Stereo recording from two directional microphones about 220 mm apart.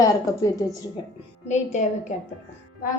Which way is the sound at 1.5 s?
30° left (ahead or behind).